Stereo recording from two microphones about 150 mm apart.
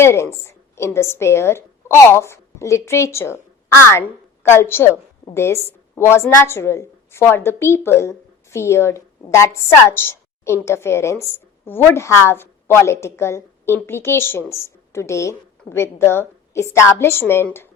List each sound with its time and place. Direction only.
0.0 s a woman's voice: 15° left (ahead or behind)